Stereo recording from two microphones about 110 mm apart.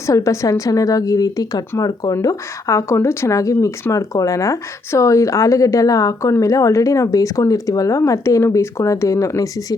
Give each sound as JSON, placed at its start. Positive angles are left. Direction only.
{"t": 0.0, "sound": "speech", "side_deg": 25}